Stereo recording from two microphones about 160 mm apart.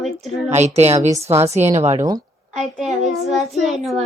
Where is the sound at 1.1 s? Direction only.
15° right (ahead or behind).